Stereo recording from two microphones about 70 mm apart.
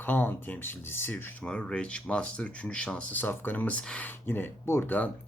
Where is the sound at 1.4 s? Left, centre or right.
Centre.